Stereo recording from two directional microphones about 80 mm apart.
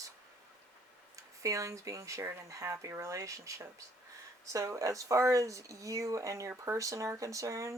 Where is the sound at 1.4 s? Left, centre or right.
Right.